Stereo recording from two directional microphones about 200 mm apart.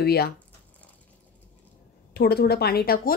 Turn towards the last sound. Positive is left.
turn(degrees=50)  # may be behind; listen again after turning